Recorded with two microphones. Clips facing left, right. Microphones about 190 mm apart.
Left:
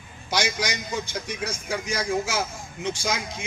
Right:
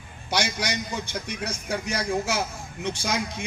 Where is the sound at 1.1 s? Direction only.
60° right (ahead or behind).